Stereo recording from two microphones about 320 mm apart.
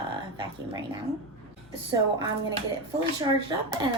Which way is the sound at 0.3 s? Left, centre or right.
Centre.